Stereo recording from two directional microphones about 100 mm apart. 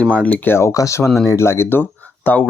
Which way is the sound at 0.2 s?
15° left (ahead or behind).